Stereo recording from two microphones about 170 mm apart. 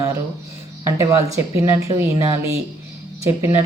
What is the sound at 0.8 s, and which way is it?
Speech, 15° right (ahead or behind).